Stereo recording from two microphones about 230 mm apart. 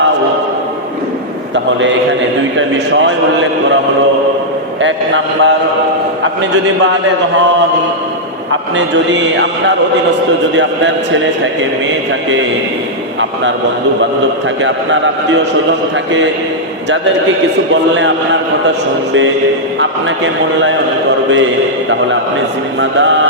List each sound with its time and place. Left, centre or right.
2.6 s speech: right
4.8 s a man's voice: right
8.7 s speech: right
14.6 s a man's voice: right
17.9 s speech: right
22.8 s speech: right